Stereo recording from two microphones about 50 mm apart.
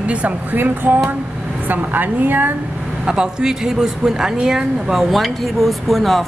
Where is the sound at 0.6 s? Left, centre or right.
Right.